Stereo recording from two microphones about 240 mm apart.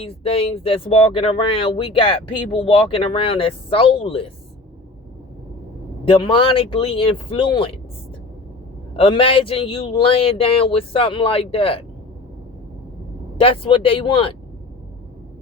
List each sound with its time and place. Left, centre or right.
0.0 s a man's voice: left
6.1 s a man's voice: left
9.0 s a man's voice: left
13.3 s a man's voice: left